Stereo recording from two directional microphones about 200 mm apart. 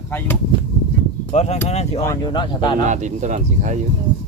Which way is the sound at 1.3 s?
35° left (ahead or behind).